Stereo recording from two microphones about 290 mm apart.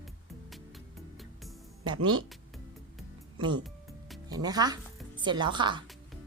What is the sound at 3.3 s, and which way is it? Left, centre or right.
A woman's voice, centre.